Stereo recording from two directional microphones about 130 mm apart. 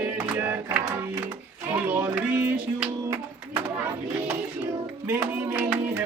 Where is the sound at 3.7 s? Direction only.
15° right (ahead or behind).